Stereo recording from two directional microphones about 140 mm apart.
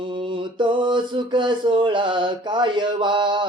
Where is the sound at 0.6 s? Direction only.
35° right (ahead or behind).